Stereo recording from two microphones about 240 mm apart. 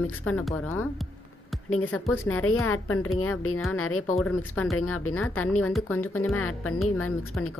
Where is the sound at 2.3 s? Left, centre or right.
Left.